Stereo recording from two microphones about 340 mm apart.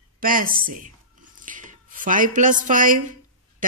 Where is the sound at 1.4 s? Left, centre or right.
Right.